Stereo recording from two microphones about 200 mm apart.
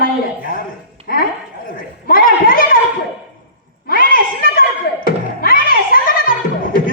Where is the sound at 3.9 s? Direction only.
45° left (ahead or behind).